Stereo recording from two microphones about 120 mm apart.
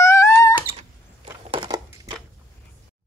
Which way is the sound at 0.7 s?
50° right (ahead or behind).